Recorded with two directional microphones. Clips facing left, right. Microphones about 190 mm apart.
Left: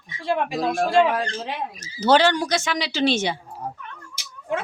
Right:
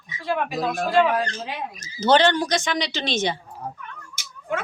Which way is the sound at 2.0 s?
10° left (ahead or behind).